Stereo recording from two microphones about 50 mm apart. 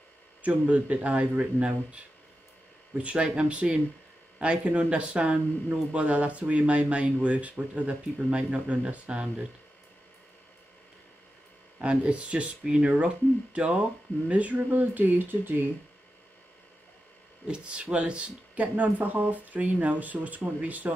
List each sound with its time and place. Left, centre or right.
0.4 s speech: right
11.8 s speech: right
17.5 s speech: right
18.5 s speech: right